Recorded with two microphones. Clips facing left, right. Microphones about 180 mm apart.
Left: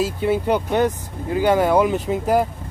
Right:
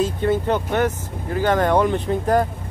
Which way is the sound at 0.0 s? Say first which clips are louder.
Even; 10° left (ahead or behind).